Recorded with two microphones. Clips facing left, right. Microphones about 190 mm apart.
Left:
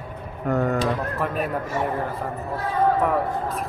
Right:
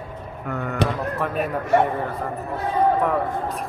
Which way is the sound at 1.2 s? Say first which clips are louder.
Right 3 dB; centre (ahead or behind).